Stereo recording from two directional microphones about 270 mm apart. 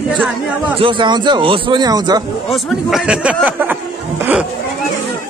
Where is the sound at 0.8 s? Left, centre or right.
Centre.